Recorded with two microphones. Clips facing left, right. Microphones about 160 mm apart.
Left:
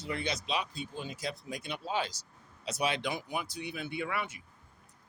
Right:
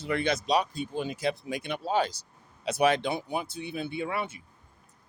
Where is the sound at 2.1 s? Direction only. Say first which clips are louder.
Right 4 dB; 60° right (ahead or behind).